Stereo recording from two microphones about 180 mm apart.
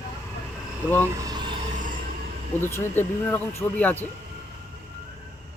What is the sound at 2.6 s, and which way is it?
Speech, 15° left (ahead or behind).